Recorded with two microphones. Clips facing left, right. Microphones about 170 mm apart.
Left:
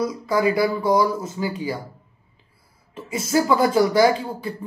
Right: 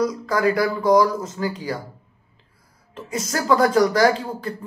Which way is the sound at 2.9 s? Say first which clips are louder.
Left 4 dB; 5° left (ahead or behind).